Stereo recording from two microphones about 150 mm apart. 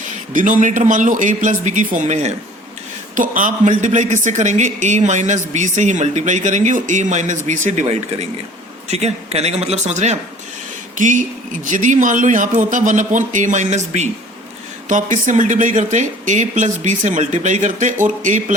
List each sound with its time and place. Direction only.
0.3 s speech: 60° right (ahead or behind)